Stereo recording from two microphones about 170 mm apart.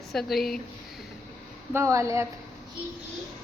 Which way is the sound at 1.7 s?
15° right (ahead or behind).